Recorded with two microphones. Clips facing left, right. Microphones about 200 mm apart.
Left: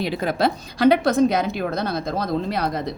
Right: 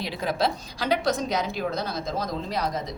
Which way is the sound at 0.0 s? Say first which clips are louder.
Left 5 dB; 55° left (ahead or behind).